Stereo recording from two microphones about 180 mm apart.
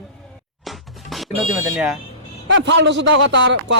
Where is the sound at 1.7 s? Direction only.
5° right (ahead or behind).